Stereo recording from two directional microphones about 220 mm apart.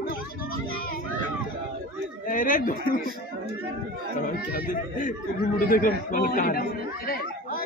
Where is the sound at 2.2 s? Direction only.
35° left (ahead or behind).